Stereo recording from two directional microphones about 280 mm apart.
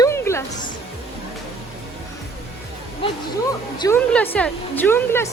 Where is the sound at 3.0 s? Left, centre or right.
Centre.